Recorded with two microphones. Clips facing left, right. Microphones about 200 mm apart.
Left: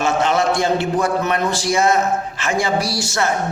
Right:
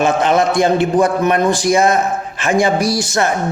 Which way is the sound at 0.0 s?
15° right (ahead or behind).